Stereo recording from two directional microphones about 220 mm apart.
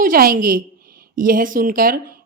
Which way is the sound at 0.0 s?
40° right (ahead or behind).